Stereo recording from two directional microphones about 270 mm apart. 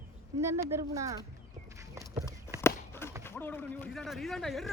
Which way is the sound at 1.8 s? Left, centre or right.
Centre.